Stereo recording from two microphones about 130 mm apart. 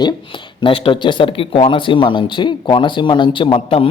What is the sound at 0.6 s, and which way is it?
A man's voice, 40° left (ahead or behind).